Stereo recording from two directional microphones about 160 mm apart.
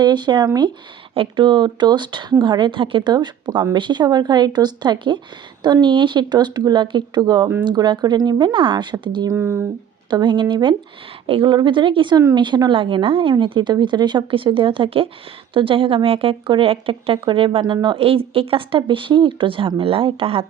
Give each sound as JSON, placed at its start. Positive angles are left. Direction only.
{"t": 0.0, "sound": "a woman's voice", "side_deg": -30}
{"t": 9.3, "sound": "speech", "side_deg": -15}
{"t": 10.1, "sound": "a woman's voice", "side_deg": -30}